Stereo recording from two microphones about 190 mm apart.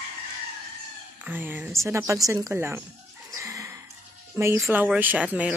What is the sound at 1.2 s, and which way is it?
Speech, 10° right (ahead or behind).